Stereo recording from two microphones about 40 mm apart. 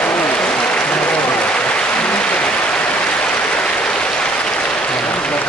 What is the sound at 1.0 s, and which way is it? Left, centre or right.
Applause, left.